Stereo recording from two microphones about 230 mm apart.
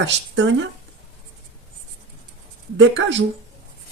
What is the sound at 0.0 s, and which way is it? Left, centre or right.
Speech, right.